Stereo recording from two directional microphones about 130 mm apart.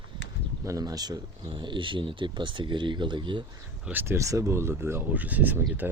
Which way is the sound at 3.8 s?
15° right (ahead or behind).